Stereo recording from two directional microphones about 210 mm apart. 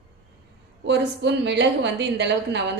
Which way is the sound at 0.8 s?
55° right (ahead or behind).